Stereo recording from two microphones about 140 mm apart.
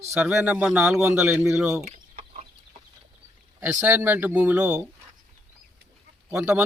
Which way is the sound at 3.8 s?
10° right (ahead or behind).